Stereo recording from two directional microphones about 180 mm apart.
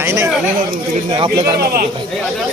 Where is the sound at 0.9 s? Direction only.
35° right (ahead or behind).